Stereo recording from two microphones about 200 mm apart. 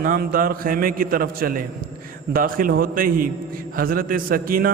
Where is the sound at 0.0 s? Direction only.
45° right (ahead or behind).